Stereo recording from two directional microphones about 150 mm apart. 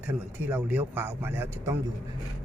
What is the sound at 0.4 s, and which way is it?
Speech, 15° right (ahead or behind).